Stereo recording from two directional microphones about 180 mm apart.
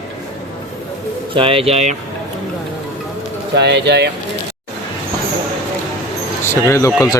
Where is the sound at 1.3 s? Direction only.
30° right (ahead or behind).